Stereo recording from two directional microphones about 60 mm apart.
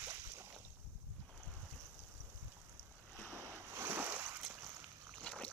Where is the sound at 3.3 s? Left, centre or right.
Right.